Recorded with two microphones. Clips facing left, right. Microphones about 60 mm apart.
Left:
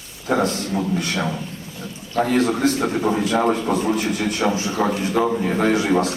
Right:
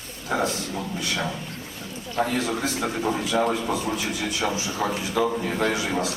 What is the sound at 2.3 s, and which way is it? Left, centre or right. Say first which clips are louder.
Speech: left 7 dB; left.